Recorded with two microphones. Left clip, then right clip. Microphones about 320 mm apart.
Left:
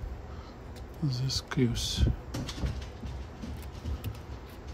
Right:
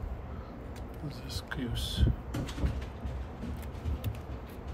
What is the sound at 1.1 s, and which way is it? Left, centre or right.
Speech, left.